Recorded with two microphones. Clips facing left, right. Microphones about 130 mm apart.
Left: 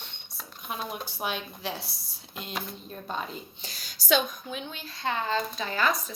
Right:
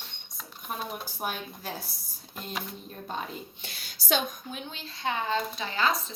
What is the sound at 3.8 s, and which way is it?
Speech, 55° right (ahead or behind).